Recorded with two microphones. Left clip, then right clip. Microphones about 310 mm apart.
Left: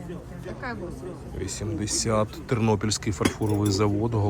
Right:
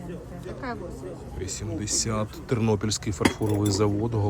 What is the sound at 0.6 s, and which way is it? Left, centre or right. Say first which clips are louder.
Speech: even; left.